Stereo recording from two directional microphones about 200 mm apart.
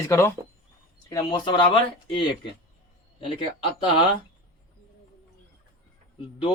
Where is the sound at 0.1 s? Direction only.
15° left (ahead or behind).